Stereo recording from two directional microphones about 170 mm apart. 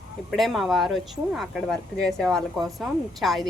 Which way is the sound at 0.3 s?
Centre (ahead or behind).